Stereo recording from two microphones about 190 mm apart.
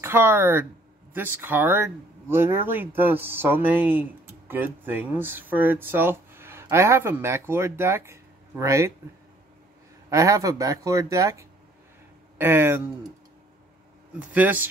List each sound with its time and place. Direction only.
0.0 s speech: 10° right (ahead or behind)
10.0 s speech: 15° right (ahead or behind)
14.3 s speech: 10° right (ahead or behind)